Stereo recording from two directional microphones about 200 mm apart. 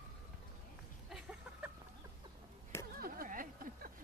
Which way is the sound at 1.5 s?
5° right (ahead or behind).